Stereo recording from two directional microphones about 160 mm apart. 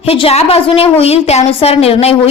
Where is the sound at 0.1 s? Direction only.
40° left (ahead or behind).